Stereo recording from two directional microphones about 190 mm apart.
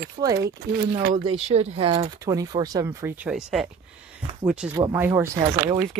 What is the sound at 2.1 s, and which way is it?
Speech, 15° right (ahead or behind).